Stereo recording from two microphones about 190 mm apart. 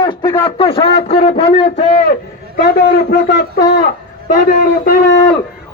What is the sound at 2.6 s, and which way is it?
A man's voice, 60° left (ahead or behind).